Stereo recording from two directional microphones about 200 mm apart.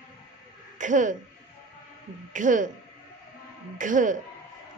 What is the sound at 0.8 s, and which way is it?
Speech, 40° right (ahead or behind).